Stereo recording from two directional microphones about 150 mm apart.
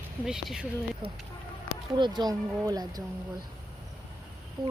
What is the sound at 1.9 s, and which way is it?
Speech, 30° right (ahead or behind).